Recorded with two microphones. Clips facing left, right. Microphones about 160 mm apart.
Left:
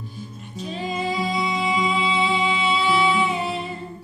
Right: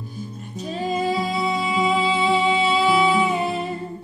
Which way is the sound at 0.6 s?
40° right (ahead or behind).